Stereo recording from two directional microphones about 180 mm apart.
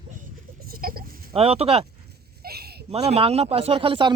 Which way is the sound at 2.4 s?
60° right (ahead or behind).